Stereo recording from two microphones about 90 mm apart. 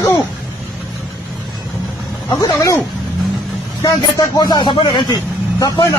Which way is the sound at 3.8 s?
45° left (ahead or behind).